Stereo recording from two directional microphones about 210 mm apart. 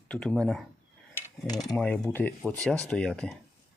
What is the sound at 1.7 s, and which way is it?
Speech, 5° left (ahead or behind).